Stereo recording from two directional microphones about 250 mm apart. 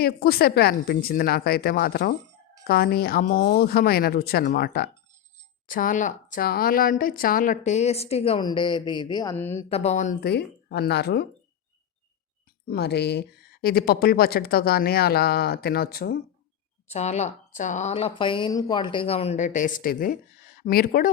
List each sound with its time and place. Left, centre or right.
0.0 s a woman's voice: left; by 9.6 s centre
9.6 s a woman's voice: left
10.2 s speech: left
12.6 s speech: left
16.9 s a woman's voice: left